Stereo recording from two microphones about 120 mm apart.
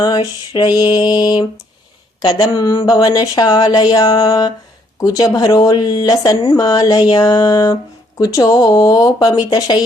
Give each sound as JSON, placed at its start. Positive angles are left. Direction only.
{"t": 0.0, "sound": "speech", "side_deg": 35}